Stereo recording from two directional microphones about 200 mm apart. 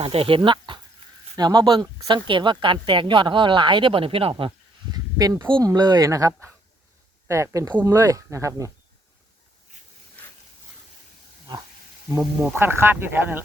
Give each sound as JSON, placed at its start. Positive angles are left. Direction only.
{"t": 0.0, "sound": "speech", "side_deg": -30}
{"t": 9.7, "sound": "a sound", "side_deg": -35}
{"t": 12.1, "sound": "speech", "side_deg": -10}